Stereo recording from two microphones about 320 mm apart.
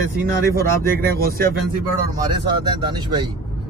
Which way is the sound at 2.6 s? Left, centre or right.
Centre.